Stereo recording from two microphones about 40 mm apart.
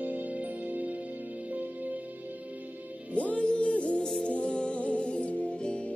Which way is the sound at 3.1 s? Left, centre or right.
Left.